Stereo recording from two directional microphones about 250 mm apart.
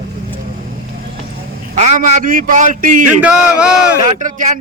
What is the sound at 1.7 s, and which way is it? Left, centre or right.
Speech, right.